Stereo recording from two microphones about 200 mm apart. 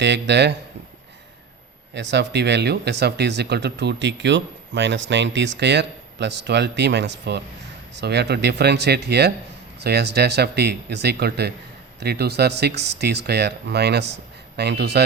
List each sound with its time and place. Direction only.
0.0 s speech: 60° right (ahead or behind)
1.9 s speech: 60° right (ahead or behind)